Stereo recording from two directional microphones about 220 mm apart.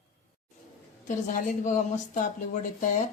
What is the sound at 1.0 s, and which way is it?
A woman's voice, 35° left (ahead or behind).